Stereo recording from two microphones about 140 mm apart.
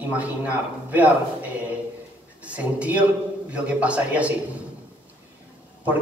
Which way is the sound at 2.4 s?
10° right (ahead or behind).